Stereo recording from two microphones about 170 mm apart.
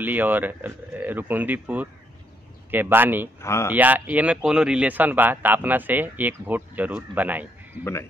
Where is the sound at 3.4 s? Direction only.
15° left (ahead or behind).